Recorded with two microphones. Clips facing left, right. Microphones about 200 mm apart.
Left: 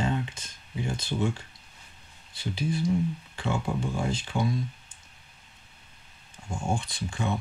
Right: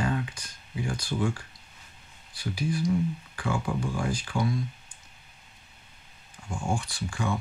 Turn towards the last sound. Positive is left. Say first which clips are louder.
# even
turn(degrees=20)  # may be behind; listen again after turning